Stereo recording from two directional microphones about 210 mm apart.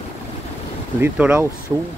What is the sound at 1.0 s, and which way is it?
Speech, 5° right (ahead or behind).